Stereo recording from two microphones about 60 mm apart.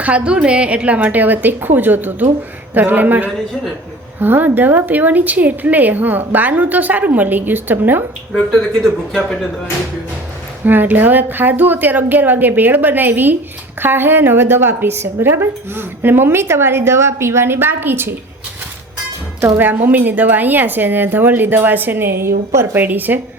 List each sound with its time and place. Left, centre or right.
0.0 s a woman's voice: right
8.3 s speech: centre
10.7 s a woman's voice: right
19.5 s a woman's voice: right